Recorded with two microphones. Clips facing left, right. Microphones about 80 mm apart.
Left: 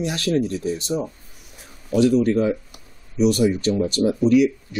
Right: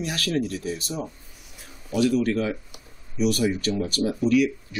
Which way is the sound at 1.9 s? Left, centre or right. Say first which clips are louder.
Left 5 dB; left.